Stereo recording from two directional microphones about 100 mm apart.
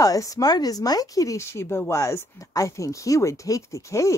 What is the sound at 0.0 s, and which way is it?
Speech, 35° left (ahead or behind).